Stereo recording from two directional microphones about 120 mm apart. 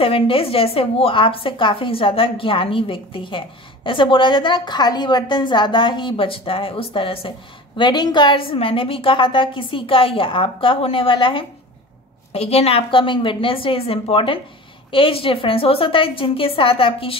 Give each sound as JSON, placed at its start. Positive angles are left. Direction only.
{"t": 0.0, "sound": "speech", "side_deg": 50}
{"t": 12.3, "sound": "speech", "side_deg": 60}